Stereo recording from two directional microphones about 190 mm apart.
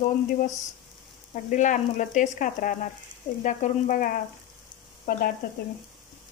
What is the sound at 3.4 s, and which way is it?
Frying, 40° left (ahead or behind).